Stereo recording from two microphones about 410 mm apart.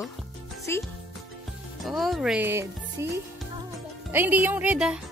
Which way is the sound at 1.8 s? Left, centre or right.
Centre.